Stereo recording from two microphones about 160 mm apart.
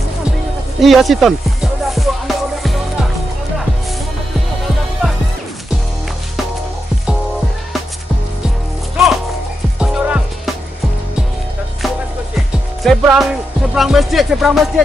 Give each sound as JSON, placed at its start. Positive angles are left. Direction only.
{"t": 0.7, "sound": "music", "side_deg": 0}
{"t": 8.9, "sound": "music", "side_deg": 0}
{"t": 12.4, "sound": "music", "side_deg": 0}